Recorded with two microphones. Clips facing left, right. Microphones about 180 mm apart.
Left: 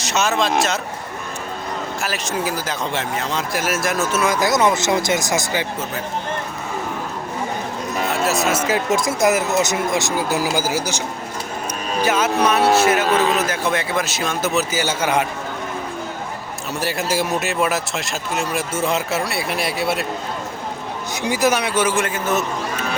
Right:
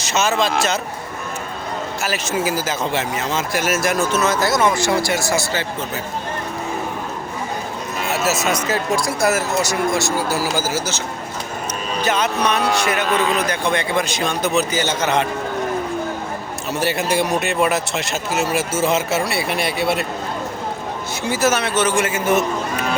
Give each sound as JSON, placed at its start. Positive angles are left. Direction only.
{"t": 0.0, "sound": "speech", "side_deg": 0}
{"t": 2.0, "sound": "speech", "side_deg": 0}
{"t": 8.1, "sound": "speech", "side_deg": -5}
{"t": 8.9, "sound": "speech", "side_deg": 20}
{"t": 12.0, "sound": "speech", "side_deg": 5}
{"t": 16.8, "sound": "speech", "side_deg": 0}
{"t": 21.2, "sound": "speech", "side_deg": 15}
{"t": 22.0, "sound": "a man's voice", "side_deg": -10}